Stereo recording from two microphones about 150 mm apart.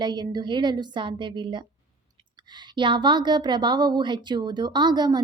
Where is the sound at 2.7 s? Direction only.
30° right (ahead or behind).